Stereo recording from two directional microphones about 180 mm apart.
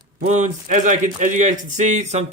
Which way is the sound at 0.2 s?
40° right (ahead or behind).